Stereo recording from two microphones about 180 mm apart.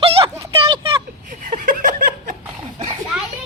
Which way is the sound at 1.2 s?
50° right (ahead or behind).